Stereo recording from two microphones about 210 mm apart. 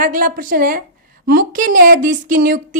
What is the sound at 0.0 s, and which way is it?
Speech, 40° right (ahead or behind).